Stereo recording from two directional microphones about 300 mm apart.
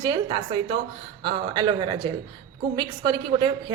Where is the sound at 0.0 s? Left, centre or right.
Centre.